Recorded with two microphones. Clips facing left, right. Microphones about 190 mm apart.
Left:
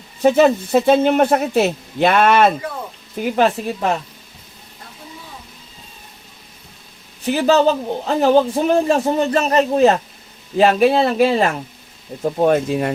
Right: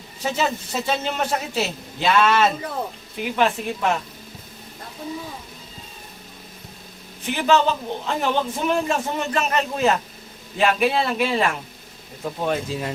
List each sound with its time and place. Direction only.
0.2 s speech: 55° left (ahead or behind)
3.3 s a man's voice: 40° left (ahead or behind)
7.3 s a man's voice: 40° left (ahead or behind); by 12.9 s 60° left (ahead or behind)